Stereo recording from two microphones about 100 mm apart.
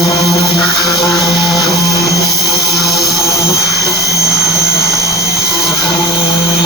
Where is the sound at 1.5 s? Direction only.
35° left (ahead or behind).